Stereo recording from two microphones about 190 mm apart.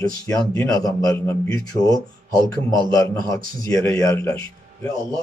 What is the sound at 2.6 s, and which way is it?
A man's voice, 20° left (ahead or behind).